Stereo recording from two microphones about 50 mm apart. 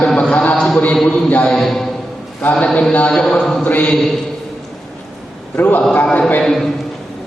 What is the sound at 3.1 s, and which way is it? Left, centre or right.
Speech, centre.